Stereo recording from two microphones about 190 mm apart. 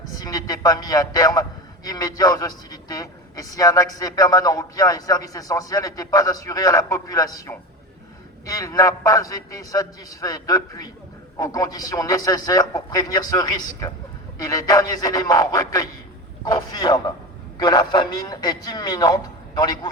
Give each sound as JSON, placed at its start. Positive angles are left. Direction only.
{"t": 0.1, "sound": "a man's voice", "side_deg": 20}